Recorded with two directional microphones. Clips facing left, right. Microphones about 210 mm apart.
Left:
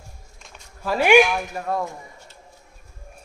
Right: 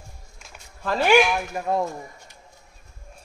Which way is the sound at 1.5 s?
15° right (ahead or behind).